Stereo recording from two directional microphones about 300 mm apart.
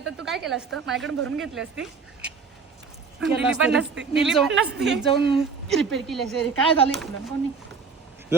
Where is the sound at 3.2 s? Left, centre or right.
Centre.